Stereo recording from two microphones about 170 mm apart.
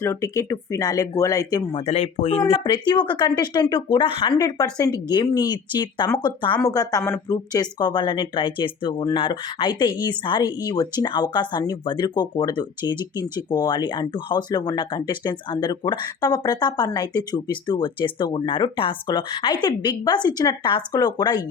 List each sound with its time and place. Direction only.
0.0 s speech: 15° left (ahead or behind)
1.8 s speech: 40° left (ahead or behind)
2.5 s speech: 30° left (ahead or behind)